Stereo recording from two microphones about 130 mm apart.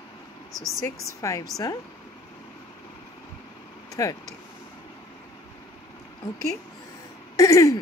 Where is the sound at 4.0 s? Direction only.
25° left (ahead or behind).